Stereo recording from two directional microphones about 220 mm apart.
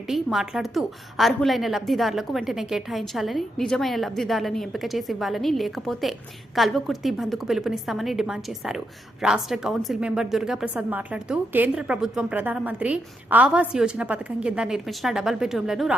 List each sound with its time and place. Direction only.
0.1 s a woman's voice: centre (ahead or behind)